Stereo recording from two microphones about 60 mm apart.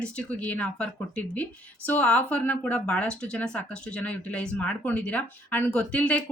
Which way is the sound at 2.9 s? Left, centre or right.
Centre.